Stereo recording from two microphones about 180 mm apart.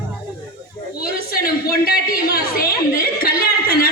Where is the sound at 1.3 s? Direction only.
55° left (ahead or behind).